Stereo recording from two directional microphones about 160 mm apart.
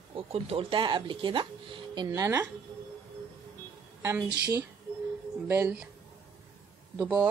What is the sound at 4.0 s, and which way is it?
A woman's voice, 15° right (ahead or behind).